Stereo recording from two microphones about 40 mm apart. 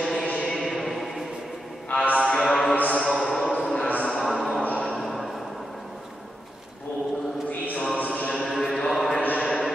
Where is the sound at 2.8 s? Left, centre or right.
Left.